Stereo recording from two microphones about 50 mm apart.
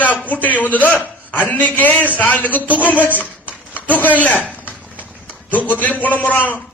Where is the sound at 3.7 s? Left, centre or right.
Left.